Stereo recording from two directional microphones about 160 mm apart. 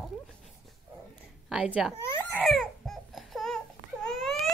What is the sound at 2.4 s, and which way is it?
Baby cry, centre (ahead or behind).